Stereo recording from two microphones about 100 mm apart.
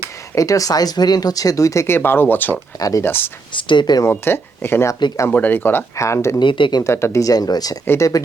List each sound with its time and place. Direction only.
0.3 s speech: 35° left (ahead or behind)
2.0 s speech: 20° left (ahead or behind)
2.7 s speech: 35° left (ahead or behind)
3.0 s speech: 20° left (ahead or behind)
3.5 s speech: 55° left (ahead or behind)
4.0 s speech: 25° left (ahead or behind)
6.4 s speech: 55° left (ahead or behind)
6.8 s speech: 30° left (ahead or behind)